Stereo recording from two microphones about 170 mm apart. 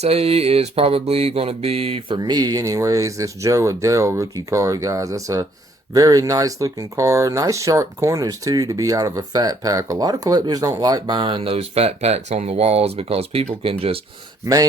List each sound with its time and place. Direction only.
0.0 s speech: 35° right (ahead or behind)
14.4 s speech: 20° right (ahead or behind)